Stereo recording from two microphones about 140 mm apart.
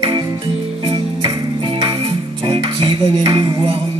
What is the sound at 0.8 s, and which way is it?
Music, 40° right (ahead or behind).